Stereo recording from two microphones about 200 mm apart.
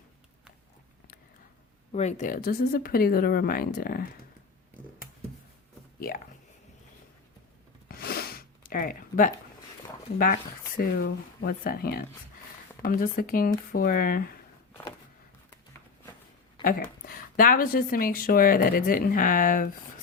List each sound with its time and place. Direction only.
1.9 s a woman's voice: 35° left (ahead or behind)
7.9 s a sound: 50° left (ahead or behind)
10.8 s a woman's voice: 50° left (ahead or behind)
16.6 s a woman's voice: 45° left (ahead or behind)